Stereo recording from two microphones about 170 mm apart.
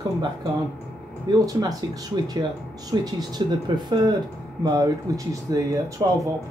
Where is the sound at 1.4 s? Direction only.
20° right (ahead or behind).